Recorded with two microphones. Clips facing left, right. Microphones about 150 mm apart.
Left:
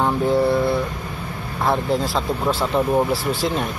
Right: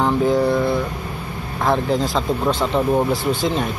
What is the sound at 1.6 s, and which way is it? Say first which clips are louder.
Speech: right 2 dB; centre (ahead or behind).